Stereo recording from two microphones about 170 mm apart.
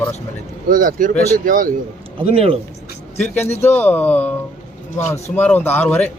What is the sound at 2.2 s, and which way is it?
Speech, 35° right (ahead or behind).